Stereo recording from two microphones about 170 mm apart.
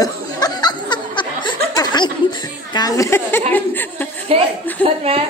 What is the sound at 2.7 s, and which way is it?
Speech, 20° left (ahead or behind).